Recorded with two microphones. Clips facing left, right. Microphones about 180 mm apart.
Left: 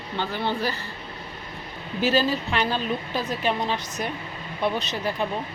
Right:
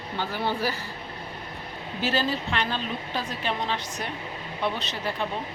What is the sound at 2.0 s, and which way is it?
Speech, 10° left (ahead or behind).